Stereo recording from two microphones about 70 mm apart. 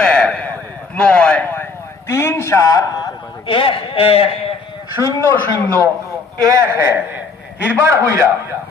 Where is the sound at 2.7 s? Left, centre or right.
Left.